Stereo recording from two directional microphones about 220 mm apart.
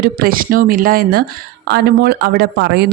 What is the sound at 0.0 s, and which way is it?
Speech, 40° right (ahead or behind).